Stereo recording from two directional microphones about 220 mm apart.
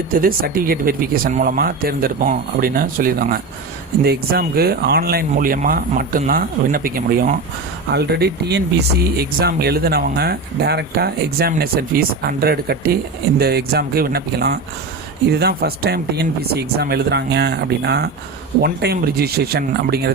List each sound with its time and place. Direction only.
0.1 s speech: 40° right (ahead or behind)